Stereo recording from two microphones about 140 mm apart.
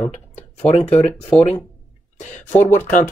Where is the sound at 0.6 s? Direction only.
50° left (ahead or behind).